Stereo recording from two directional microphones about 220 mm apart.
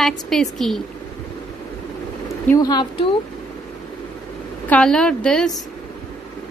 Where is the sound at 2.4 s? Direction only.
15° left (ahead or behind).